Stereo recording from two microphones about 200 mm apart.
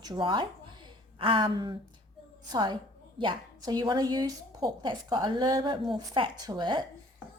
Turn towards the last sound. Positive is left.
turn(degrees=-20)  # may be behind; listen again after turning